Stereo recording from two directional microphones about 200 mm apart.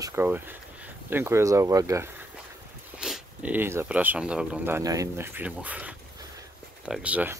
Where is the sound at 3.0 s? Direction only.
5° right (ahead or behind).